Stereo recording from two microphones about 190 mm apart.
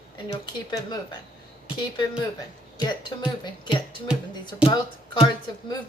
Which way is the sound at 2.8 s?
25° left (ahead or behind).